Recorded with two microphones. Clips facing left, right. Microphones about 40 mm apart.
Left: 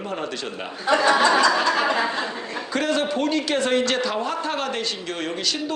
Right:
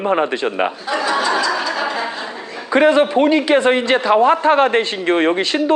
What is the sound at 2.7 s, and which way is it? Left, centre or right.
A man's voice, right.